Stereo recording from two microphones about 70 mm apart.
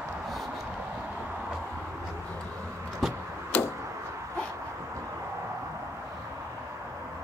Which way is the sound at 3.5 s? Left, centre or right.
Left.